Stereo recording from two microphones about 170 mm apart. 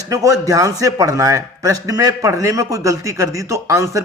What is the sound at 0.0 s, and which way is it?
A man's voice, 20° right (ahead or behind).